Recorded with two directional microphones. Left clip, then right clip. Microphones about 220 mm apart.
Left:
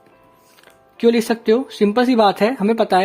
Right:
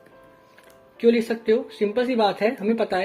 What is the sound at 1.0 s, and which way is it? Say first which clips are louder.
Speech: left 4 dB; 45° left (ahead or behind).